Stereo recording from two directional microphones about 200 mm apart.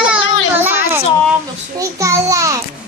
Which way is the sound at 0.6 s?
10° right (ahead or behind).